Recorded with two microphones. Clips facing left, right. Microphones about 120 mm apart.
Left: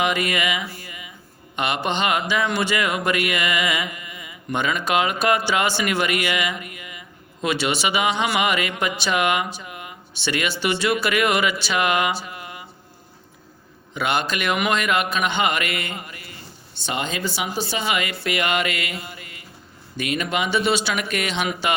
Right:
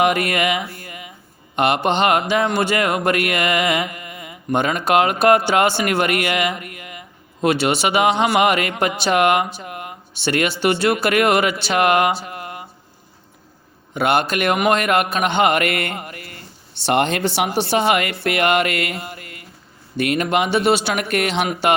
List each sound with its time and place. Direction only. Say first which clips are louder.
0.0 s speech: right 5 dB; 55° right (ahead or behind)
0.7 s a sound: right 3 dB; 50° right (ahead or behind)
1.5 s speech: right 6 dB; 55° right (ahead or behind)
13.9 s speech: right 5 dB; 55° right (ahead or behind)
18.2 s music: right 5 dB; 55° right (ahead or behind)
20.0 s speech: right 6 dB; 55° right (ahead or behind)